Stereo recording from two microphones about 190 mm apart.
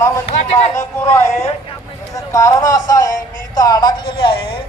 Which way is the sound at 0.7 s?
15° left (ahead or behind).